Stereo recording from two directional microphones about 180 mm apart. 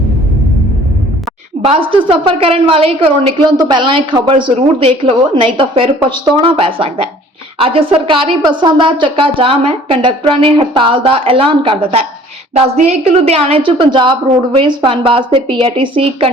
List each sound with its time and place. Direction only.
1.6 s a woman's voice: 30° right (ahead or behind)